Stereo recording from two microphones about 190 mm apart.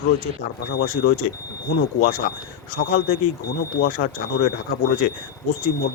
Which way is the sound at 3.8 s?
55° left (ahead or behind).